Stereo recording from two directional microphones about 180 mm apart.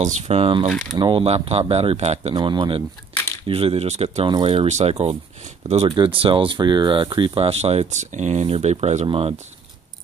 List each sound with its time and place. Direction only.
0.0 s speech: 35° right (ahead or behind)
2.3 s speech: 25° right (ahead or behind)